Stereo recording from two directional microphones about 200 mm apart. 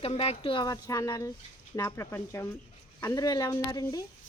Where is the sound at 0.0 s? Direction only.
30° left (ahead or behind).